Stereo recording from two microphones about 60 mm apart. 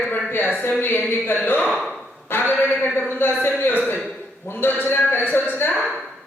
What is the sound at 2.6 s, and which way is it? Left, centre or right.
A man's voice, left.